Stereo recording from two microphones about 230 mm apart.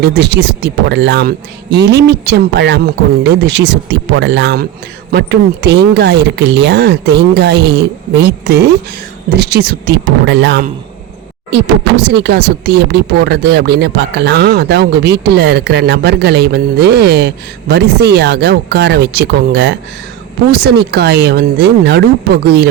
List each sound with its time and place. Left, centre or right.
0.0 s speech: right